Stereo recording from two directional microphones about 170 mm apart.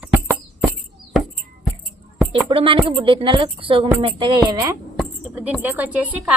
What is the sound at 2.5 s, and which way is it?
A woman's voice, 30° right (ahead or behind).